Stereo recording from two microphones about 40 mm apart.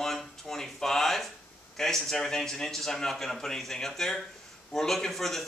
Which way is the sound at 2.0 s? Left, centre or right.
Centre.